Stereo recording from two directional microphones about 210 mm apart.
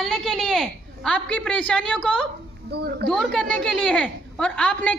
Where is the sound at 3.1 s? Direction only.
5° left (ahead or behind).